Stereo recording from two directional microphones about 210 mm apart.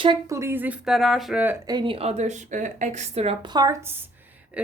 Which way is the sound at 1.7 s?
25° right (ahead or behind).